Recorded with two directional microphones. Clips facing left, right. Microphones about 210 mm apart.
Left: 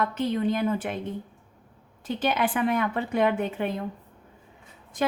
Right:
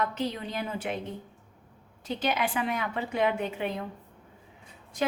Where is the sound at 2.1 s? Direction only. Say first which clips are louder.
Left 3 dB; 50° left (ahead or behind).